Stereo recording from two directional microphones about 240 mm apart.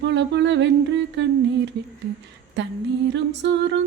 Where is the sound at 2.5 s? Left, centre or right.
Right.